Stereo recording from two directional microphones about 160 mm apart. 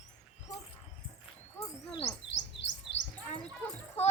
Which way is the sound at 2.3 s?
90° left.